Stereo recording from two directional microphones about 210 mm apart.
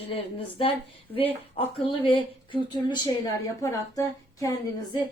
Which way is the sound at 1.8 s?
25° left (ahead or behind).